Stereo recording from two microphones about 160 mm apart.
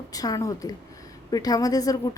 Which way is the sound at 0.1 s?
20° left (ahead or behind).